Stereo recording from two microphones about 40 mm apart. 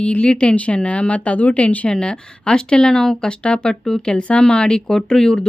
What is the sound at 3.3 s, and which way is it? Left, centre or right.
Speech, left.